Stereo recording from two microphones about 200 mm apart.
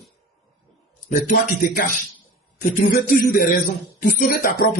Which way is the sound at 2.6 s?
45° left (ahead or behind).